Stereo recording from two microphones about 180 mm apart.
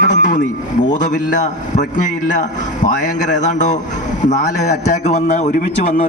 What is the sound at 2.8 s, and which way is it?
A man's voice, 45° left (ahead or behind).